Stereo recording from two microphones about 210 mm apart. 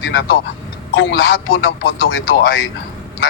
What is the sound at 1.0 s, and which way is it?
Speech, 50° left (ahead or behind).